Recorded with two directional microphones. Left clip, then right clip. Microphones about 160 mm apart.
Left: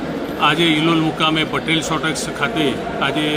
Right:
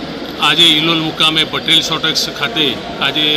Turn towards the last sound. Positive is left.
turn(degrees=5)  # may be behind; listen again after turning